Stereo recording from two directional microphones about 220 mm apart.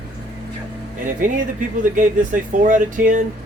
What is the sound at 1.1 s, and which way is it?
Speech, 35° right (ahead or behind).